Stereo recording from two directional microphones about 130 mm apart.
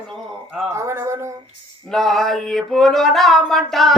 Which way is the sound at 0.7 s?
20° right (ahead or behind).